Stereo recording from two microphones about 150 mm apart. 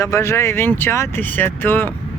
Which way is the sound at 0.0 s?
20° left (ahead or behind).